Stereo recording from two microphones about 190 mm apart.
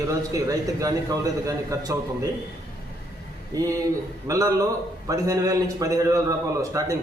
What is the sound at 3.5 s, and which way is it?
A man's voice, 20° right (ahead or behind).